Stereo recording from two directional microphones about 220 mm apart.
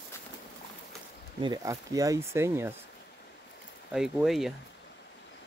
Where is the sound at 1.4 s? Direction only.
15° right (ahead or behind).